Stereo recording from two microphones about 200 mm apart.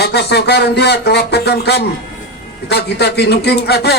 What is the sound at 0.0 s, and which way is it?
A man's voice, 55° left (ahead or behind).